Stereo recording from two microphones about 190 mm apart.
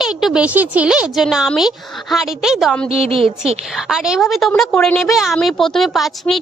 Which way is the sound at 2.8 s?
30° right (ahead or behind).